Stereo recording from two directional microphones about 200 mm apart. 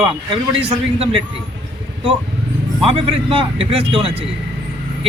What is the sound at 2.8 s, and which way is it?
Speech, 25° right (ahead or behind).